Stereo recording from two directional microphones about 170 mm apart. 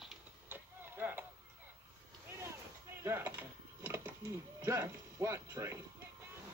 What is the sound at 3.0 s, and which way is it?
Mechanisms, 15° right (ahead or behind).